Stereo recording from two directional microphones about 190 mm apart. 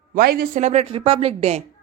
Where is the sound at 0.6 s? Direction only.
35° right (ahead or behind).